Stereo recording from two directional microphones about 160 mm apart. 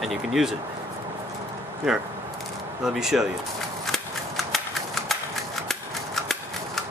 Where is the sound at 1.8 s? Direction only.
5° right (ahead or behind).